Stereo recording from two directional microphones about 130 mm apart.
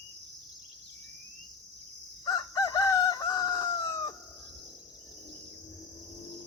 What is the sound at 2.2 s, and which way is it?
Chicken, 25° left (ahead or behind).